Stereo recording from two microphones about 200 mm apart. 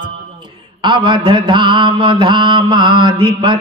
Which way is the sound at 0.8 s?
20° right (ahead or behind).